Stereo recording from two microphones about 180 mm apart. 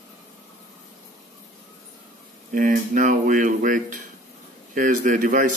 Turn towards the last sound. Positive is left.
turn(degrees=-45)  # may be behind; listen again after turning